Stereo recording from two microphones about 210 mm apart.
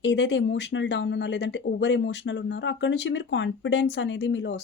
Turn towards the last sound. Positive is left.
turn(degrees=55)  # may be behind; listen again after turning